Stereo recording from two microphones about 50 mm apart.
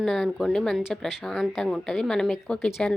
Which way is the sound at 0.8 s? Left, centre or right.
Centre.